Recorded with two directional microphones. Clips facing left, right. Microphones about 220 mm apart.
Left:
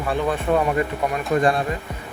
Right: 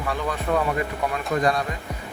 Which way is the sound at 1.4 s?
30° left (ahead or behind).